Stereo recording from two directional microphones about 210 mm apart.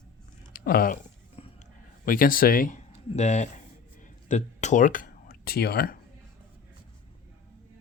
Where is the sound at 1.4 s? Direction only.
25° left (ahead or behind).